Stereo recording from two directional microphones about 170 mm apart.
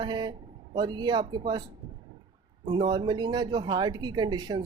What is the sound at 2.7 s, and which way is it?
A man's voice, 25° right (ahead or behind).